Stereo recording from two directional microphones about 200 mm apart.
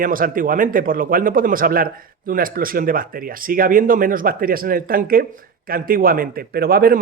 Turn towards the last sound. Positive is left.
turn(degrees=-50)  # may be behind; listen again after turning